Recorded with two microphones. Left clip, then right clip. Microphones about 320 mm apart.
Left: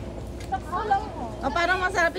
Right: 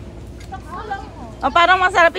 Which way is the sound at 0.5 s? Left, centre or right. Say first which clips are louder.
Left 3 dB; left.